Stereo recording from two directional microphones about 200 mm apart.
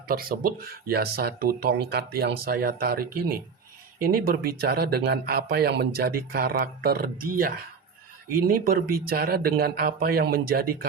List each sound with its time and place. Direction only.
0.1 s speech: 45° right (ahead or behind)